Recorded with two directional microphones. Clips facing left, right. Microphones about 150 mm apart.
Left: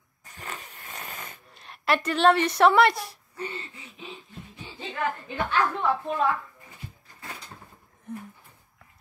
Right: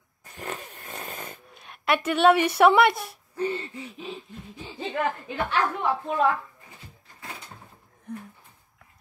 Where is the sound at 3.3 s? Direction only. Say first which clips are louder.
Right 8 dB; 30° right (ahead or behind).